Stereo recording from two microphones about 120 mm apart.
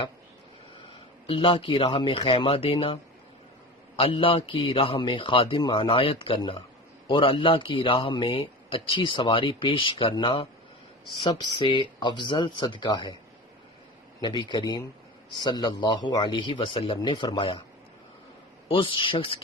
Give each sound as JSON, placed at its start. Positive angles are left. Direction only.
{"t": 1.3, "sound": "a man's voice", "side_deg": 45}
{"t": 14.2, "sound": "a man's voice", "side_deg": 40}
{"t": 18.7, "sound": "a man's voice", "side_deg": 45}